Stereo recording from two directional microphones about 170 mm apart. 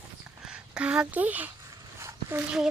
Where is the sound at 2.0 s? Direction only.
15° right (ahead or behind).